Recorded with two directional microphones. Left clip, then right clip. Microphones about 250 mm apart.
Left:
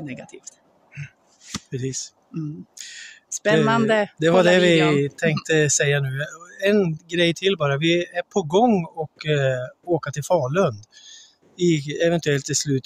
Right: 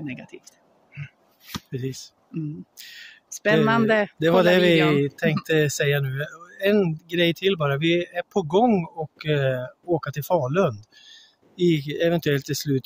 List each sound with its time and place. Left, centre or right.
0.0 s speech: centre
1.7 s speech: centre
3.6 s speech: centre
4.2 s a man's voice: centre